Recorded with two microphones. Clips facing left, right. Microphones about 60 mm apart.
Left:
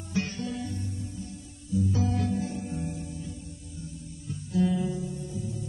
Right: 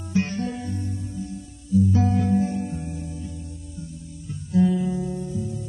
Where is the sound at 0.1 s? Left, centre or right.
Right.